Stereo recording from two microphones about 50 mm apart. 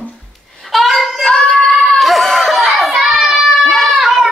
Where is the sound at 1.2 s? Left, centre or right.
Centre.